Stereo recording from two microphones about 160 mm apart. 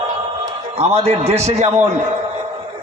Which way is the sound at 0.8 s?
40° right (ahead or behind).